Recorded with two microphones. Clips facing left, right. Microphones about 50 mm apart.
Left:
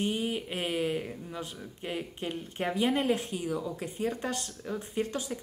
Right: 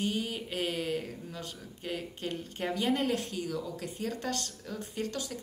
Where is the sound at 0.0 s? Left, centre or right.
Left.